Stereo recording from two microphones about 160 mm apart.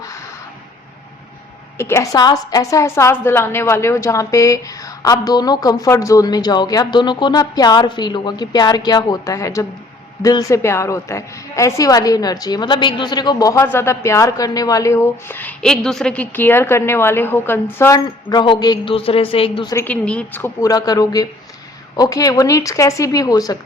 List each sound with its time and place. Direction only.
1.8 s a woman's voice: 15° left (ahead or behind)
18.0 s a woman's voice: 30° left (ahead or behind)
19.7 s a woman's voice: 10° left (ahead or behind)